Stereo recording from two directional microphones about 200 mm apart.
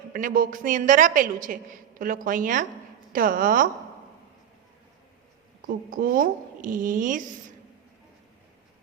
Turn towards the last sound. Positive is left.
turn(degrees=-40)  # may be behind; listen again after turning